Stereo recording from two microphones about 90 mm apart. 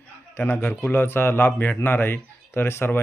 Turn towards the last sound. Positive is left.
turn(degrees=25)  # may be behind; listen again after turning